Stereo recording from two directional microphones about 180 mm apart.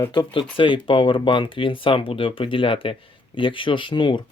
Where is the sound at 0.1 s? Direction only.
25° left (ahead or behind).